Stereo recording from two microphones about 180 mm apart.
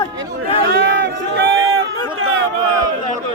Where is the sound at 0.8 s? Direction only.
90° right.